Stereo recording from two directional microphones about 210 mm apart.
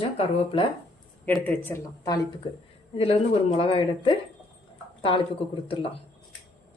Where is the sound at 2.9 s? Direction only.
25° left (ahead or behind).